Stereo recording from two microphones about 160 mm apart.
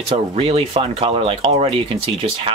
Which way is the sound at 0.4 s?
35° right (ahead or behind).